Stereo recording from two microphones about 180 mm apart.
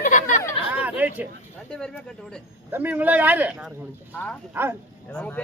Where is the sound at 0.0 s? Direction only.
45° left (ahead or behind).